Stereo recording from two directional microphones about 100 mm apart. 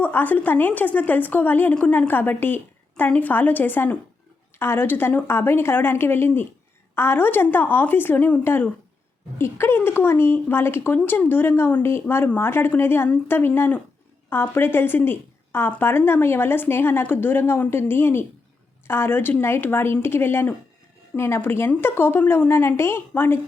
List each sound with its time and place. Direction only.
0.0 s a woman's voice: 20° left (ahead or behind)